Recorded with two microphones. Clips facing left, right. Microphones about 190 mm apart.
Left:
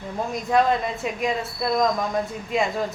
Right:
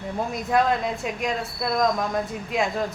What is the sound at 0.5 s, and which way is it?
A woman's voice, centre (ahead or behind).